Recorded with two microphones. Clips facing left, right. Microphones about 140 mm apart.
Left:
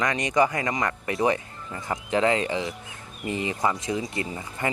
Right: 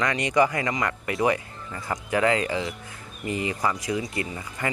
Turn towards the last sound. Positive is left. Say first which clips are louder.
# left 1 dB
turn(degrees=25)  # may be behind; listen again after turning